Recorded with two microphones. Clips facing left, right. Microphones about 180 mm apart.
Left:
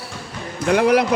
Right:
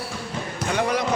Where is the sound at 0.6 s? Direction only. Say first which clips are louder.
Left 8 dB; 65° left (ahead or behind).